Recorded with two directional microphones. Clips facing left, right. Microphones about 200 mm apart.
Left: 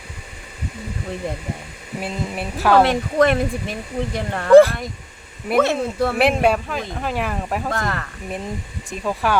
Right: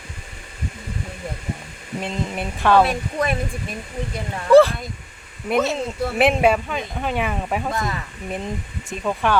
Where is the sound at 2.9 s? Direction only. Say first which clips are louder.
Left 6 dB; 75° left (ahead or behind).